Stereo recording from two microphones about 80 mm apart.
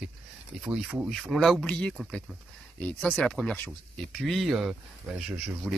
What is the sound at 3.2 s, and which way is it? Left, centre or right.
Speech, centre.